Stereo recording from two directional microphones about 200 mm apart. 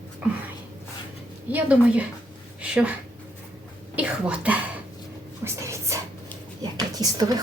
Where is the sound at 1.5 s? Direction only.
5° right (ahead or behind).